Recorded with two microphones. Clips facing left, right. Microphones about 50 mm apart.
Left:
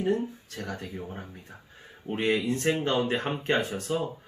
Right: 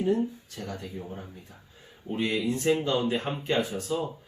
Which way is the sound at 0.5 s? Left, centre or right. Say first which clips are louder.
Left 1 dB; left.